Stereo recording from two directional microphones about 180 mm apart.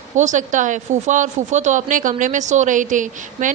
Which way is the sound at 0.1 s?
45° right (ahead or behind).